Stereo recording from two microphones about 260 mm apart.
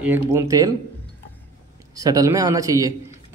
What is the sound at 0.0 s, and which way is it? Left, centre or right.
Speech, centre.